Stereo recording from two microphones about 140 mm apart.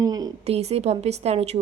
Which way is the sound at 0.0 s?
25° right (ahead or behind).